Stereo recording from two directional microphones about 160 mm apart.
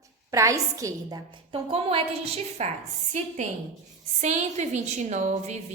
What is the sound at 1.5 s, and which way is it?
A woman's voice, 35° right (ahead or behind).